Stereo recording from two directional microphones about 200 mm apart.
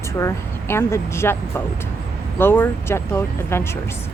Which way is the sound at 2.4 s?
10° left (ahead or behind).